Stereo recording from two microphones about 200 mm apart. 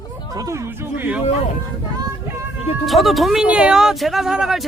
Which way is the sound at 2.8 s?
Centre (ahead or behind).